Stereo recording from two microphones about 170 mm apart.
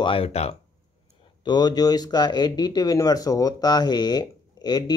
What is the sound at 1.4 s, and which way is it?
Speech, 25° left (ahead or behind).